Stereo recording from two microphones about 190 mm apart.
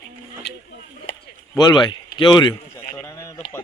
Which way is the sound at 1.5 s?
20° left (ahead or behind).